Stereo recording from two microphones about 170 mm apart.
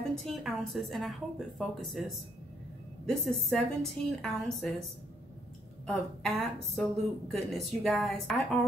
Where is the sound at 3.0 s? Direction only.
Centre (ahead or behind).